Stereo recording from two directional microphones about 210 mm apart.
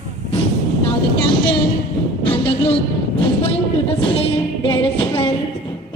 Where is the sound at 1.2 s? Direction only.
25° left (ahead or behind).